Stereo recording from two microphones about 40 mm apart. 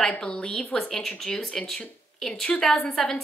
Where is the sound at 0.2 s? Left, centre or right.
Left.